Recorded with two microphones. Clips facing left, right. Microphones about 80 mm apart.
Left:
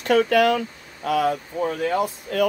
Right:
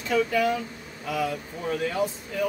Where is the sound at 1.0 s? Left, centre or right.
Left.